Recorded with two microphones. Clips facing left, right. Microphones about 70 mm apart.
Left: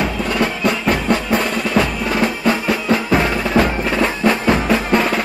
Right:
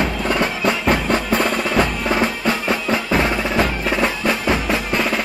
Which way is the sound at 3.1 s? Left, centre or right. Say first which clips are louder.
Left 2 dB; centre.